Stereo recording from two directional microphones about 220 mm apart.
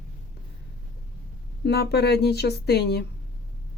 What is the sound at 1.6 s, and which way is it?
Speech, 45° left (ahead or behind).